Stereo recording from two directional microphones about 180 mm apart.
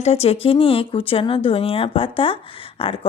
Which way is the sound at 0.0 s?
35° left (ahead or behind).